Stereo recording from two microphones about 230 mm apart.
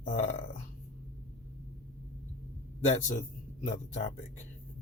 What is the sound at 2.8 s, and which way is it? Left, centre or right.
Speech, left.